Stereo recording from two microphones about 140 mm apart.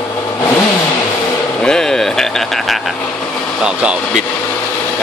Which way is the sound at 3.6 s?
10° right (ahead or behind).